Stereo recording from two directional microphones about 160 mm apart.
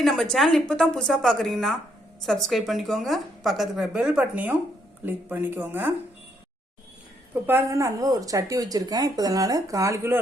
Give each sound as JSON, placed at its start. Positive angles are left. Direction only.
{"t": 0.0, "sound": "speech", "side_deg": 0}
{"t": 7.3, "sound": "speech", "side_deg": -15}